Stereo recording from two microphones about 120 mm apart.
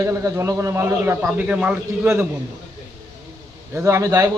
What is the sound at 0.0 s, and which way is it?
A man's voice, 25° right (ahead or behind).